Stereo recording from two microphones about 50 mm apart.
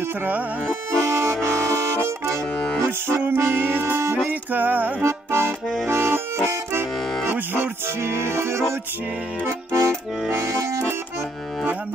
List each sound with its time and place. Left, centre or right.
0.9 s accordion: right
2.5 s accordion: left
3.3 s music: right
4.3 s music: right
5.0 s accordion: right
7.0 s accordion: centre
7.3 s music: right
9.5 s accordion: right